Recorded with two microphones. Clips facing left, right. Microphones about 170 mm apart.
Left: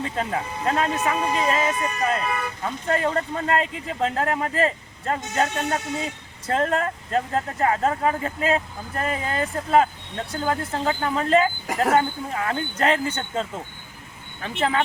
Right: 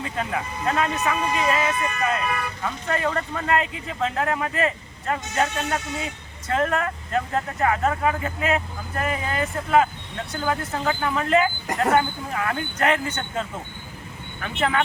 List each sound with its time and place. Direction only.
0.0 s speech: 30° left (ahead or behind)
11.7 s speech: 5° left (ahead or behind)
11.9 s speech: 30° left (ahead or behind)
14.4 s speech: 30° left (ahead or behind)